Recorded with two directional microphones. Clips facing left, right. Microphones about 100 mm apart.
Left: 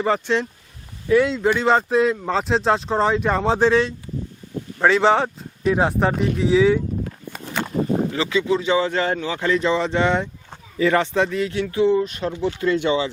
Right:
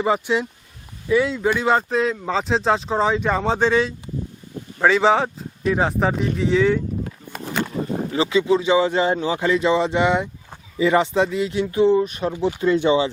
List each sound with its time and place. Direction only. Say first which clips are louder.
0.0 s speech: even; 10° right (ahead or behind)
8.1 s speech: right 2 dB; 20° right (ahead or behind)